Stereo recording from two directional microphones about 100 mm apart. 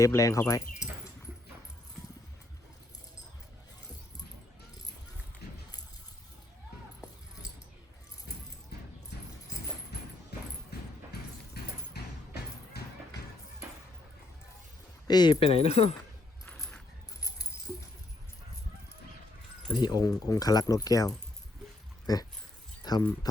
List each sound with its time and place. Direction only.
0.0 s speech: 35° left (ahead or behind)
15.0 s speech: 45° left (ahead or behind)
15.4 s speech: 90° left
16.6 s coin: 5° left (ahead or behind)
17.2 s keys jangling: 35° left (ahead or behind)
19.7 s speech: 45° left (ahead or behind)
22.8 s a sound: 40° left (ahead or behind)